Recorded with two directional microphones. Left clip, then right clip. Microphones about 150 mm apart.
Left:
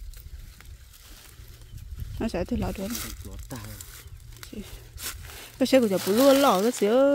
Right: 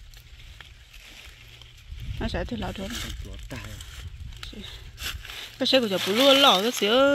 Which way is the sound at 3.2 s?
15° left (ahead or behind).